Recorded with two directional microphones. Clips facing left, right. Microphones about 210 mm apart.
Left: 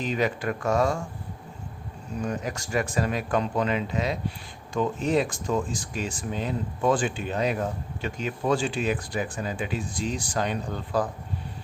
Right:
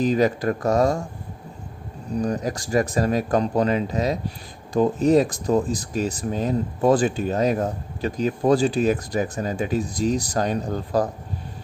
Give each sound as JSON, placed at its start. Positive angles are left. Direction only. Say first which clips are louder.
{"t": 0.0, "sound": "speech", "louder": "right 7 dB", "side_deg": -40}
{"t": 2.1, "sound": "speech", "louder": "right 6 dB", "side_deg": -40}